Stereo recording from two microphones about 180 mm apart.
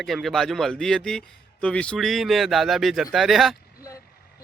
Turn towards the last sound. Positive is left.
turn(degrees=0)  # may be behind; listen again after turning